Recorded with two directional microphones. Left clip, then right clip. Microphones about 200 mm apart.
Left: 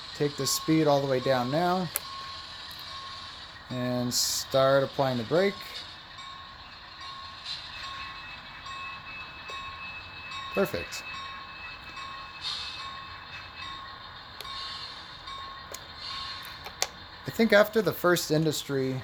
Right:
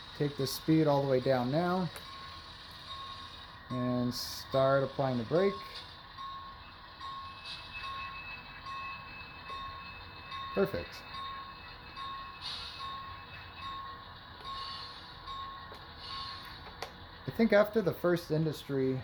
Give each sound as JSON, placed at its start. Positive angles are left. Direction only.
{"t": 0.2, "sound": "speech", "side_deg": 10}
{"t": 3.8, "sound": "speech", "side_deg": 15}
{"t": 10.5, "sound": "speech", "side_deg": 15}
{"t": 16.8, "sound": "a sound", "side_deg": 40}
{"t": 17.2, "sound": "speech", "side_deg": 20}